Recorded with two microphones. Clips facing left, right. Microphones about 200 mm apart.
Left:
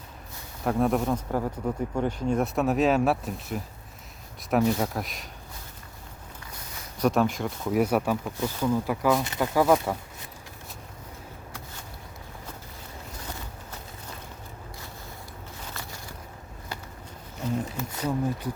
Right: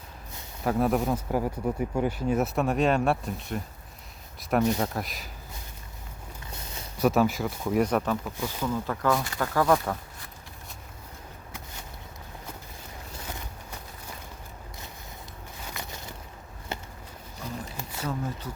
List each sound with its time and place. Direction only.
0.6 s speech: centre (ahead or behind)
7.0 s speech: 5° right (ahead or behind)
15.7 s walk: 20° right (ahead or behind)
18.0 s speech: 15° left (ahead or behind)